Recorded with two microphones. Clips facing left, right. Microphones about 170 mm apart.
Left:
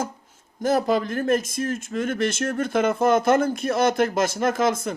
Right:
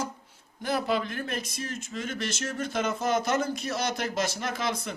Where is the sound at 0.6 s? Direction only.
45° left (ahead or behind).